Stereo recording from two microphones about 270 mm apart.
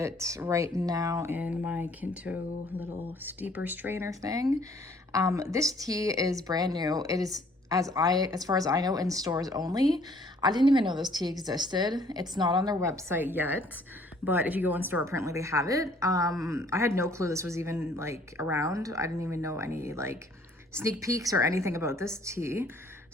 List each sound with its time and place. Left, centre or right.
0.0 s speech: centre